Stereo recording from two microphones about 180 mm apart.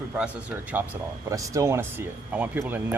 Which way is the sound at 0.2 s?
5° right (ahead or behind).